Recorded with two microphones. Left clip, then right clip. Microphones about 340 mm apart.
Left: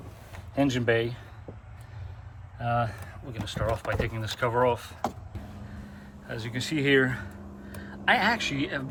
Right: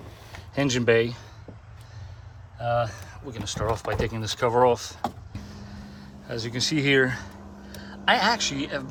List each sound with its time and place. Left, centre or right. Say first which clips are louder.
0.5 s speech: right 4 dB; right
2.6 s speech: right 3 dB; centre
6.2 s speech: right 6 dB; centre